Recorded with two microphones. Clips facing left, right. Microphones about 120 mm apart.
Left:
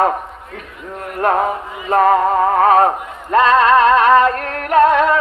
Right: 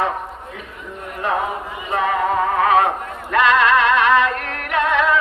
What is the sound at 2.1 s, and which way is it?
Music, 40° left (ahead or behind).